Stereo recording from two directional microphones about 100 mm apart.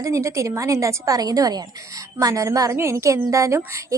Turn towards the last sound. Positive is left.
turn(degrees=-30)  # may be behind; listen again after turning